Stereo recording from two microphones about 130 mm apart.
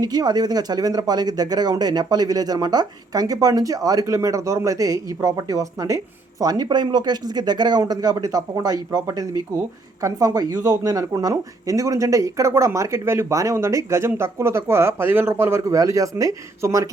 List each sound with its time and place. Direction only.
0.0 s speech: 30° right (ahead or behind)